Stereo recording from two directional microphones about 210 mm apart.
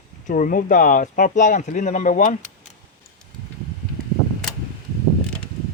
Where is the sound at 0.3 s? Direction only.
40° left (ahead or behind).